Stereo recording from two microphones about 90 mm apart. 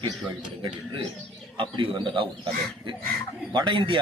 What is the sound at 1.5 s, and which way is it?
Speech, 70° right (ahead or behind).